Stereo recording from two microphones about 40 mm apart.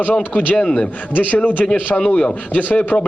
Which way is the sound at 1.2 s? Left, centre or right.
Left.